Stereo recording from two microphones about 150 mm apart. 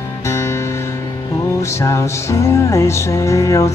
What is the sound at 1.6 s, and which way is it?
Music, 20° left (ahead or behind).